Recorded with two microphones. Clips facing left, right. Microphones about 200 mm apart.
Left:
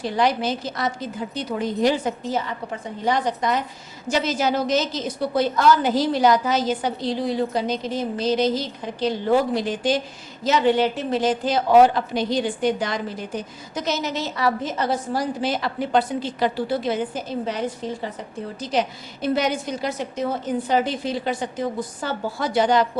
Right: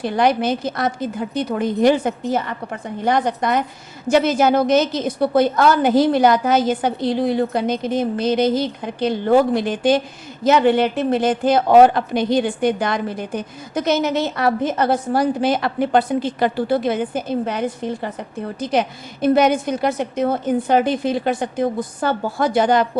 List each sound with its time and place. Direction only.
0.0 s a woman's voice: 55° right (ahead or behind)